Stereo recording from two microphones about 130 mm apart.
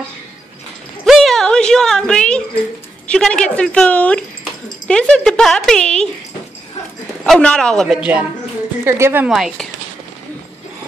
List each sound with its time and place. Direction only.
1.0 s a sound: centre (ahead or behind)
3.1 s a woman's voice: 5° left (ahead or behind)
7.2 s speech: 5° left (ahead or behind)
8.0 s a woman's voice: 10° right (ahead or behind)
8.8 s a woman's voice: 20° right (ahead or behind)
9.3 s speech: centre (ahead or behind)